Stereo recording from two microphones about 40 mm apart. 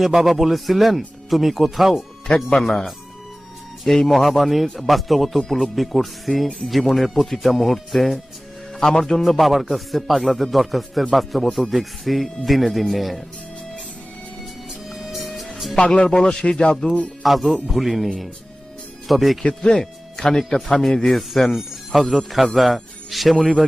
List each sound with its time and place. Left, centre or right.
0.0 s a man's voice: centre
2.2 s speech: left
2.6 s a man's voice: centre
14.7 s music: centre
16.0 s speech: centre
16.8 s music: left
17.2 s a man's voice: centre
19.4 s speech: centre
19.8 s music: centre
20.4 s a man's voice: centre